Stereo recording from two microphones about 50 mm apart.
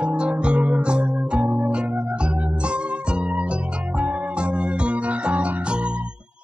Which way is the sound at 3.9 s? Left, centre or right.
Right.